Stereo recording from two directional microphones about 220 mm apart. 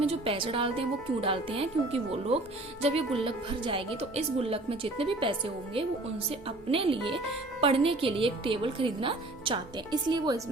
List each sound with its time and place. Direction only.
0.0 s a woman's voice: 25° right (ahead or behind)